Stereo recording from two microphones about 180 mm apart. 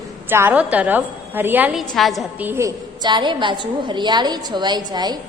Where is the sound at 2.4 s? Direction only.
15° right (ahead or behind).